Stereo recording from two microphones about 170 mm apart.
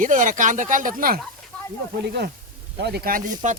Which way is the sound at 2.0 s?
75° right (ahead or behind).